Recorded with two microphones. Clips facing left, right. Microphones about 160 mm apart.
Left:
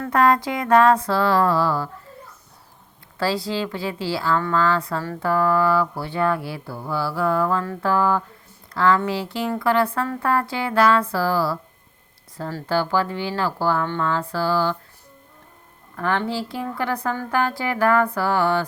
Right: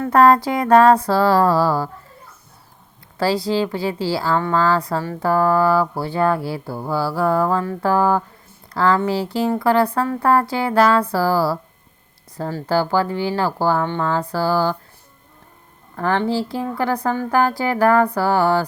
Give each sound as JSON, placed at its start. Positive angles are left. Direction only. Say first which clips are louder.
{"t": 0.1, "sound": "speech", "louder": "right 5 dB", "side_deg": -35}
{"t": 3.2, "sound": "speech", "louder": "right 5 dB", "side_deg": -30}
{"t": 12.6, "sound": "speech", "louder": "right 3 dB", "side_deg": -35}
{"t": 16.0, "sound": "speech", "louder": "right 4 dB", "side_deg": -35}